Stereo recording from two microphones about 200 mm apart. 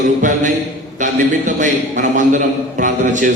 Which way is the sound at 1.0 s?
40° right (ahead or behind).